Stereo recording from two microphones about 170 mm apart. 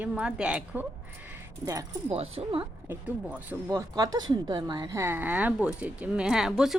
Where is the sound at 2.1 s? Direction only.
35° right (ahead or behind).